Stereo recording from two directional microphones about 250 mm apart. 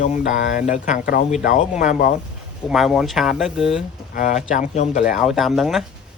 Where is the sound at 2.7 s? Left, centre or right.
Centre.